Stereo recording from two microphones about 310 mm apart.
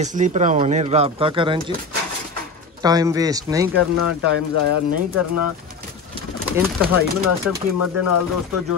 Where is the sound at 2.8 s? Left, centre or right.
Centre.